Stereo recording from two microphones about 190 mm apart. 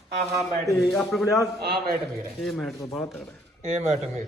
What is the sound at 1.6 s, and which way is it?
Speech, 55° right (ahead or behind).